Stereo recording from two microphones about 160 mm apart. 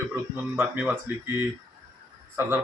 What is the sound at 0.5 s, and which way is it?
Speech, 10° right (ahead or behind).